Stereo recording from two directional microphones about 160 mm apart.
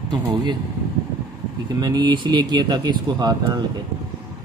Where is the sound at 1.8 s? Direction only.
25° right (ahead or behind).